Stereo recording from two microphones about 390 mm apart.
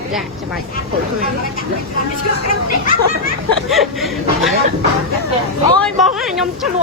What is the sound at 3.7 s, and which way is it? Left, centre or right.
Speech, centre.